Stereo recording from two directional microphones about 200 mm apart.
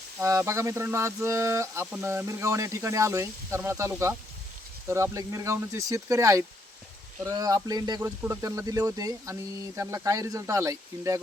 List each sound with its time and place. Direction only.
0.2 s speech: 15° right (ahead or behind)